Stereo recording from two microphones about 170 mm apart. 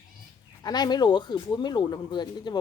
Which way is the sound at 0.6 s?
25° left (ahead or behind).